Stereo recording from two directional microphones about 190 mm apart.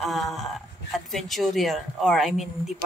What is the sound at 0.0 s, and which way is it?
Speech, centre (ahead or behind).